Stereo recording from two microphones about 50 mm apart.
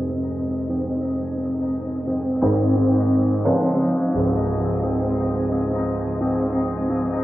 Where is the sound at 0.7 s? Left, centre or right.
Centre.